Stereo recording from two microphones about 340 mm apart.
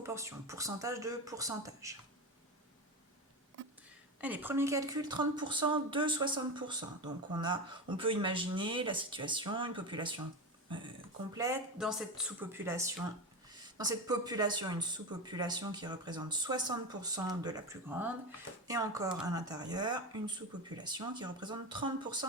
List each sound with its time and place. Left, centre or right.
0.0 s speech: centre
4.2 s speech: centre
10.7 s a sound: centre
11.3 s speech: centre